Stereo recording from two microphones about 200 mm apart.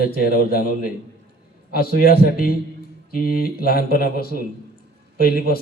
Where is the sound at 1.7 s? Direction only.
50° left (ahead or behind).